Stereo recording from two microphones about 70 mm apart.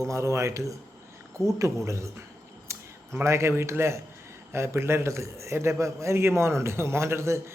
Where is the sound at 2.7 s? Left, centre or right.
Right.